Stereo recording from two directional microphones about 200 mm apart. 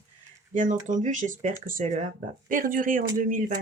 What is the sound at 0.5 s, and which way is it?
Speech, 40° right (ahead or behind).